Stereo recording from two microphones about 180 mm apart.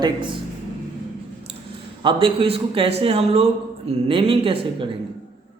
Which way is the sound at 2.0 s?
30° right (ahead or behind).